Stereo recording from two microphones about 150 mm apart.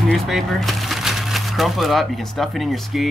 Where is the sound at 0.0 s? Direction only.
Centre (ahead or behind).